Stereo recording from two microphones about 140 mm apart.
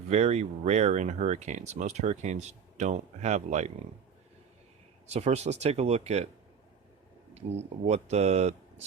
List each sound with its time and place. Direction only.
0.1 s speech: 50° right (ahead or behind)
5.0 s speech: 50° right (ahead or behind)
7.3 s speech: 50° right (ahead or behind)